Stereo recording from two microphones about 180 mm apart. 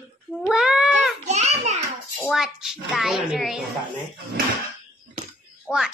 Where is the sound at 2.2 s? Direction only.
Centre (ahead or behind).